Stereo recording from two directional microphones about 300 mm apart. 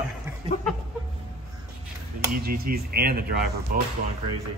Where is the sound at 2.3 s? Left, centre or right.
Right.